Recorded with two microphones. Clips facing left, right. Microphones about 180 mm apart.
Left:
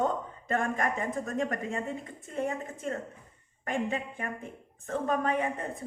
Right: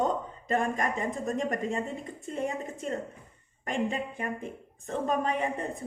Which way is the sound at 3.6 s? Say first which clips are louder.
Right 1 dB; 20° right (ahead or behind).